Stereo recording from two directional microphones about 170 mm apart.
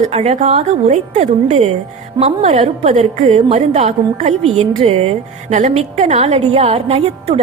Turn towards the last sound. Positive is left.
turn(degrees=-35)  # may be behind; listen again after turning